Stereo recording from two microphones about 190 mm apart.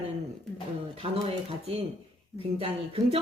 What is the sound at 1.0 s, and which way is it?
A woman's voice, 30° right (ahead or behind).